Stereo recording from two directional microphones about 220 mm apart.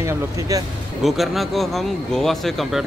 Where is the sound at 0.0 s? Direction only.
15° right (ahead or behind).